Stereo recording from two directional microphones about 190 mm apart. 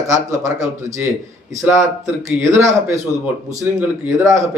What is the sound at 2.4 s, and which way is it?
A man's voice, 15° right (ahead or behind).